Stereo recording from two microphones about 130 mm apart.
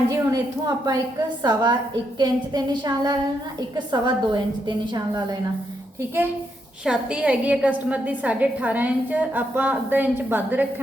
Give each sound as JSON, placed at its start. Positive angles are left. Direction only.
{"t": 0.1, "sound": "a woman's voice", "side_deg": -30}
{"t": 6.8, "sound": "a woman's voice", "side_deg": -10}